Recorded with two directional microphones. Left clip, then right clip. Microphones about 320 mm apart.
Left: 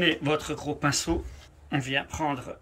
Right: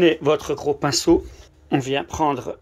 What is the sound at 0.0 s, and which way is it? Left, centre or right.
Speech, centre.